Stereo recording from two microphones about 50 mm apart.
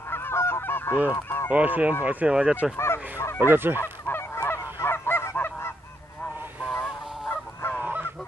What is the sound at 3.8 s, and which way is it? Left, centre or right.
Goose, left.